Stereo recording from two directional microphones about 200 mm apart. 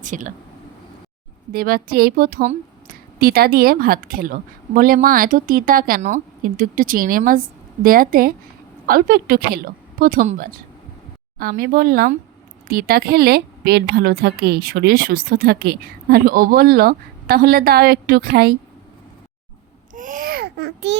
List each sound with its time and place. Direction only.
0.0 s speech: 40° right (ahead or behind)
1.5 s a woman's voice: 50° right (ahead or behind)
19.9 s a child's voice: 40° right (ahead or behind)